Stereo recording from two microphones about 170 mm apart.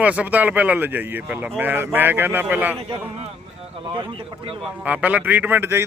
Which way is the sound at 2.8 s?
35° right (ahead or behind).